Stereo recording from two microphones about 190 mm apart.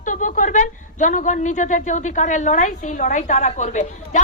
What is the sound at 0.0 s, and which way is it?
A woman's voice, 40° left (ahead or behind).